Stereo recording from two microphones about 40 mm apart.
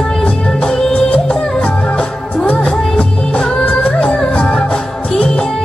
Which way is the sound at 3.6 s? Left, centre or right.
Left.